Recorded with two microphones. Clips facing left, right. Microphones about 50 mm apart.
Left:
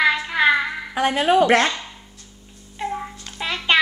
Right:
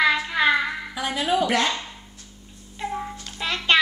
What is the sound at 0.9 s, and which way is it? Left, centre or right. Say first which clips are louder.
Speech: left 7 dB; left.